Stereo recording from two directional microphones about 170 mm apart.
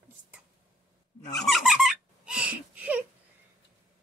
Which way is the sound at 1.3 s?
Centre (ahead or behind).